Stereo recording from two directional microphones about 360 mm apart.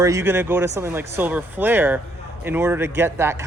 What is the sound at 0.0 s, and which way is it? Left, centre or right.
Speech, centre.